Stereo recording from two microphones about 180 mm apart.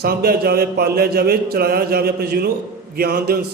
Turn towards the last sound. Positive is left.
turn(degrees=-60)  # may be behind; listen again after turning